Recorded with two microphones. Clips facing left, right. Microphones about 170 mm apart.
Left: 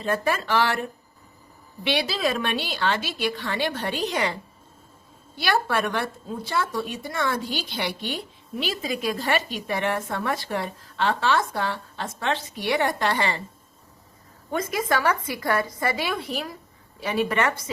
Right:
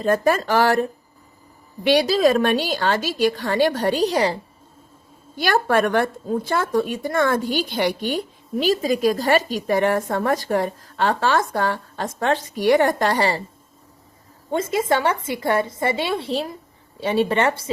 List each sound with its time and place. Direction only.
0.0 s speech: 40° right (ahead or behind)
5.4 s speech: 45° right (ahead or behind)
14.5 s a woman's voice: 25° right (ahead or behind)